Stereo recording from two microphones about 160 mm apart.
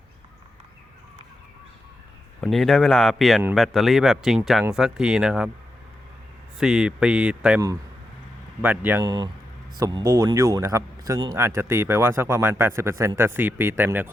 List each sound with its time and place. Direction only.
2.4 s speech: centre (ahead or behind)
6.6 s speech: 5° right (ahead or behind)
8.6 s speech: 10° right (ahead or behind)
9.0 s speech: 25° right (ahead or behind)